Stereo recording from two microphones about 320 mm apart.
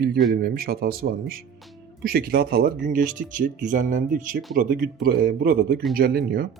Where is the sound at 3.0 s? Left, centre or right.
Centre.